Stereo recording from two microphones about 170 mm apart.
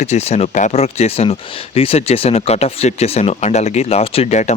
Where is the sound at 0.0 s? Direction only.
40° left (ahead or behind).